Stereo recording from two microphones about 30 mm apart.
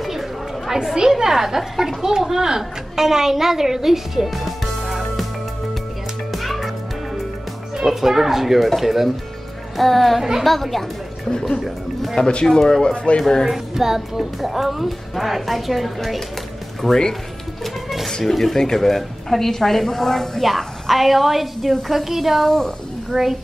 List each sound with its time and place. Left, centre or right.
0.0 s chatter: centre
1.1 s speech: centre
4.3 s music: centre
6.3 s music: centre
7.7 s speech: centre
9.8 s a woman's voice: centre
11.2 s speech: left
12.2 s speech: left
12.4 s speech: centre
13.5 s a woman's voice: centre
17.8 s a sound: centre
18.2 s a woman's voice: centre
23.1 s a woman's voice: centre